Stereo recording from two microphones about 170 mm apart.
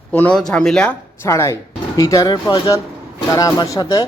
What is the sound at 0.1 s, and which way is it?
Speech, 10° left (ahead or behind).